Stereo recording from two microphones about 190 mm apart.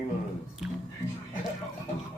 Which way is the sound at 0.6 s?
5° right (ahead or behind).